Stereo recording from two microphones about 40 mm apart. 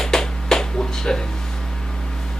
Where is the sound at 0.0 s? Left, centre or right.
Centre.